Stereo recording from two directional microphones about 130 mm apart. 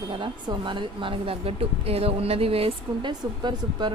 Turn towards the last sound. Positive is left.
turn(degrees=-35)  # may be behind; listen again after turning